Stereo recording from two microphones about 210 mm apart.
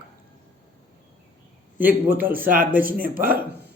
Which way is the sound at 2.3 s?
40° right (ahead or behind).